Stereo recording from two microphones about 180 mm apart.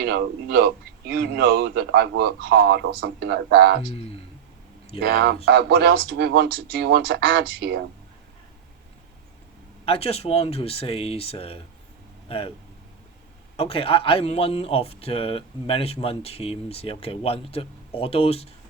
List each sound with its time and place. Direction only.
0.0 s speech: 65° right (ahead or behind)
3.9 s speech: 35° left (ahead or behind)
4.9 s speech: 60° right (ahead or behind)
9.8 s speech: 35° left (ahead or behind)
13.6 s speech: 30° left (ahead or behind)